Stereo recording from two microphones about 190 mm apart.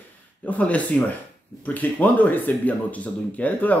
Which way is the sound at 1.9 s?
10° left (ahead or behind).